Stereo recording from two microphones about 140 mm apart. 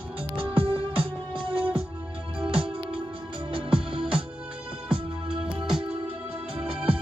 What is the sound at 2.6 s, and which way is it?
Music, 40° right (ahead or behind).